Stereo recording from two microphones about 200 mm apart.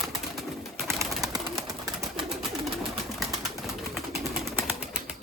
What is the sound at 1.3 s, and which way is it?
Bird, 20° right (ahead or behind).